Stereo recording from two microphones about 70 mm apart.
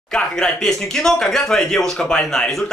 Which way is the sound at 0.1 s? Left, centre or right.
Centre.